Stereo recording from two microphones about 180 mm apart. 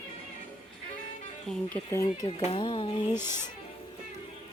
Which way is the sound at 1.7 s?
15° left (ahead or behind).